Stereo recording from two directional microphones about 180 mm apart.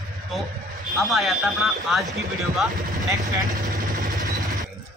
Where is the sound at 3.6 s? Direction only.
45° right (ahead or behind).